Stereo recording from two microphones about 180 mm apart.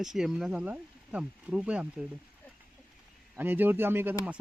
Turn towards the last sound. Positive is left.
turn(degrees=-10)  # may be behind; listen again after turning